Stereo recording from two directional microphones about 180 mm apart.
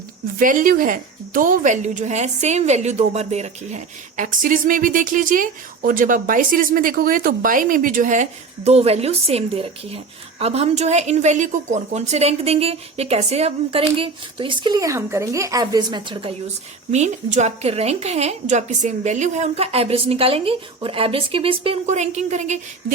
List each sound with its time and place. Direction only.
0.3 s a woman's voice: 50° right (ahead or behind); by 16.3 s 25° right (ahead or behind)
16.9 s a woman's voice: 40° right (ahead or behind)